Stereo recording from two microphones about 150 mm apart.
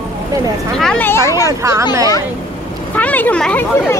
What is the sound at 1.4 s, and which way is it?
Speech, 20° right (ahead or behind).